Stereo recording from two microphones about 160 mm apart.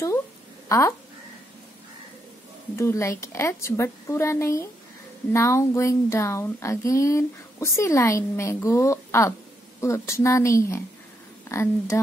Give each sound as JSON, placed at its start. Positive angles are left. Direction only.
{"t": 0.7, "sound": "speech", "side_deg": 20}
{"t": 2.7, "sound": "speech", "side_deg": 15}